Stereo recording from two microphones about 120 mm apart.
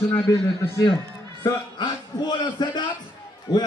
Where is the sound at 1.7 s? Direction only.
35° left (ahead or behind).